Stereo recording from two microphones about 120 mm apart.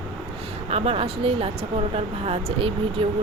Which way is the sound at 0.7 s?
55° right (ahead or behind).